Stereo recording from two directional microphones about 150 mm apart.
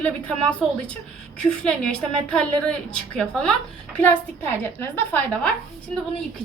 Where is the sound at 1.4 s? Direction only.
5° left (ahead or behind).